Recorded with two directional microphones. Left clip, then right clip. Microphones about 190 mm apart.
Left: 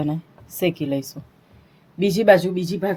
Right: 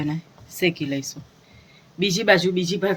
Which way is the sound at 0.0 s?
35° left (ahead or behind).